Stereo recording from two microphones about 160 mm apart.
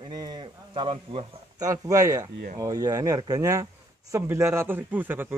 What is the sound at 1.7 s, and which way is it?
Speech, 20° right (ahead or behind).